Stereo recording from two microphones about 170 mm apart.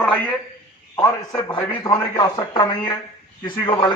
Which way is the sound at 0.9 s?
20° left (ahead or behind).